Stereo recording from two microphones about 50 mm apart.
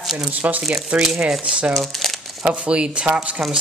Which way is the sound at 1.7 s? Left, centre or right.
Centre.